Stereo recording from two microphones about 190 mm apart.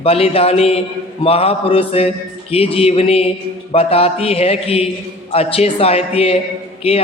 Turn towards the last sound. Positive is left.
turn(degrees=30)  # may be behind; listen again after turning